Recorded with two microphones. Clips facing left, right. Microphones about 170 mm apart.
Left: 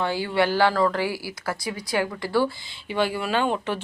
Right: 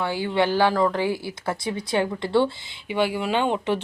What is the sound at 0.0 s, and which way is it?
Speech, 15° right (ahead or behind).